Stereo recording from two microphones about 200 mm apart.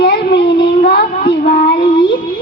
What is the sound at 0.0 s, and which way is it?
Child singing, 55° left (ahead or behind).